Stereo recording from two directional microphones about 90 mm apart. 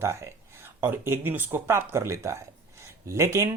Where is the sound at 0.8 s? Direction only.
25° right (ahead or behind).